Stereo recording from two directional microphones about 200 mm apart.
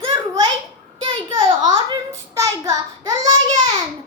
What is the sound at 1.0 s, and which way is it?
A child's voice, 25° right (ahead or behind).